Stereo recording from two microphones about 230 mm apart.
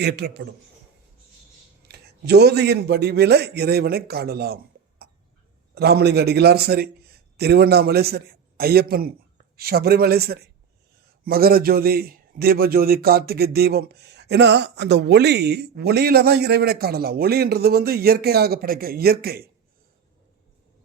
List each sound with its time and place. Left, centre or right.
0.0 s a man's voice: right
1.9 s a man's voice: right